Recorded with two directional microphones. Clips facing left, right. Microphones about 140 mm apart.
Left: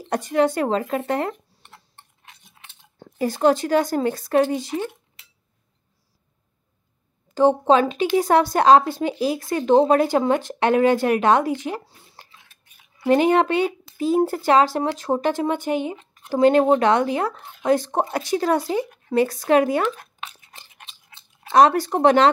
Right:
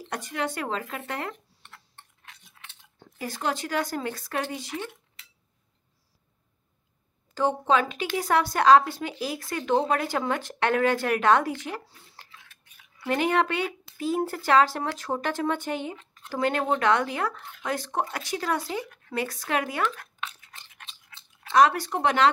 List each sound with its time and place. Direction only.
0.1 s speech: 35° left (ahead or behind)
1.3 s chewing: 15° left (ahead or behind)
3.2 s speech: 30° left (ahead or behind)
7.3 s speech: 25° left (ahead or behind)
19.6 s chewing: 25° left (ahead or behind)
21.5 s speech: 35° left (ahead or behind)